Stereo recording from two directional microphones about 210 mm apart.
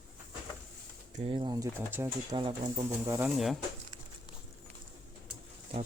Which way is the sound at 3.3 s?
Centre (ahead or behind).